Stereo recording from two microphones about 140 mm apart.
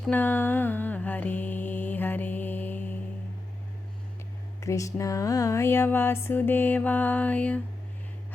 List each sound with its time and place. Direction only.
0.1 s mantra: 15° left (ahead or behind)
4.6 s speech: 20° left (ahead or behind)